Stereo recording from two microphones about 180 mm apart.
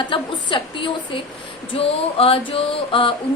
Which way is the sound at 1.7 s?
30° left (ahead or behind).